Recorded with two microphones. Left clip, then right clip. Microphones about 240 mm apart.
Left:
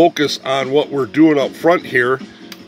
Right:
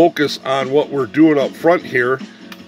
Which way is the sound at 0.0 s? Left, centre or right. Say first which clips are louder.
Even; centre.